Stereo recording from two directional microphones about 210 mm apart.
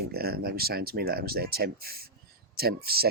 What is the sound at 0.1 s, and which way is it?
Speech, 45° right (ahead or behind).